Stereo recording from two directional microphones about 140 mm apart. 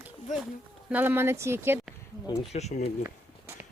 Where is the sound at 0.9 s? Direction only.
15° right (ahead or behind).